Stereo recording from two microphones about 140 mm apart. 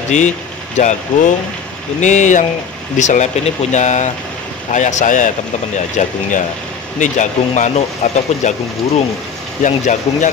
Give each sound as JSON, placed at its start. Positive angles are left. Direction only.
{"t": 0.1, "sound": "speech", "side_deg": 60}
{"t": 9.6, "sound": "speech", "side_deg": 60}